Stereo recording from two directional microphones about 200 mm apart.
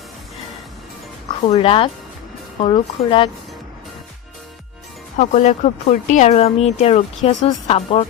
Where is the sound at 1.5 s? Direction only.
30° left (ahead or behind).